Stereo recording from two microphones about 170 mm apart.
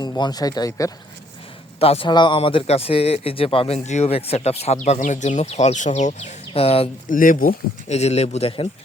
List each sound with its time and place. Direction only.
0.0 s speech: 25° left (ahead or behind)
1.8 s speech: 35° left (ahead or behind)
7.1 s speech: 55° left (ahead or behind); by 8.6 s 35° left (ahead or behind)